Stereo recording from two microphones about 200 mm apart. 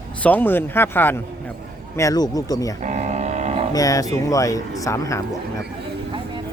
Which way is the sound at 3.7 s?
15° left (ahead or behind).